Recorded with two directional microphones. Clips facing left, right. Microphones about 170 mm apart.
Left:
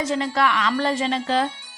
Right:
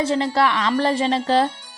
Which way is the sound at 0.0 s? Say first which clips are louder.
Right 3 dB; 30° right (ahead or behind).